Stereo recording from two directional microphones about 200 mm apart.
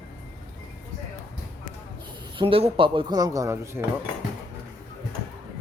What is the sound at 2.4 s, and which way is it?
Speech, 30° right (ahead or behind).